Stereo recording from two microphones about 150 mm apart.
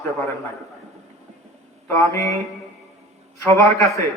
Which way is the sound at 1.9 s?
20° left (ahead or behind).